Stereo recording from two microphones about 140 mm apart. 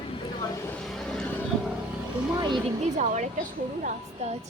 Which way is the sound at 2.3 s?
30° right (ahead or behind).